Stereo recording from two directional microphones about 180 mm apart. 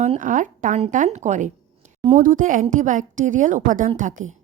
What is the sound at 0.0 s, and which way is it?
A woman's voice, 45° right (ahead or behind).